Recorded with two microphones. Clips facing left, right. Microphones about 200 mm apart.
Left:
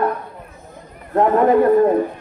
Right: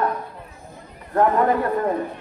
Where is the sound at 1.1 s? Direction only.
20° left (ahead or behind).